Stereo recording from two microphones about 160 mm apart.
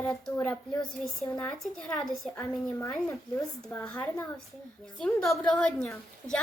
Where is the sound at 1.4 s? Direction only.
10° left (ahead or behind).